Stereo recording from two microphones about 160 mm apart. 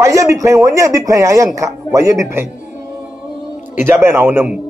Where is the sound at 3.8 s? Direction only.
15° right (ahead or behind).